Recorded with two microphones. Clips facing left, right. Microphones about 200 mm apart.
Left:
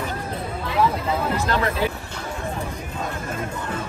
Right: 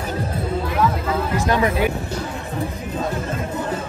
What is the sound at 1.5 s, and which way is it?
Speech, 15° right (ahead or behind).